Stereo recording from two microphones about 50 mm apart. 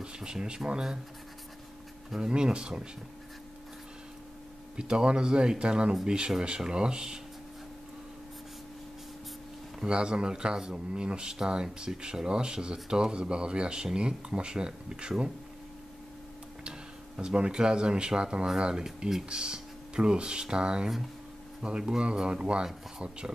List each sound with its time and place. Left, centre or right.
0.0 s speech: centre
2.0 s speech: centre
4.7 s speech: centre
9.8 s speech: centre
17.2 s speech: centre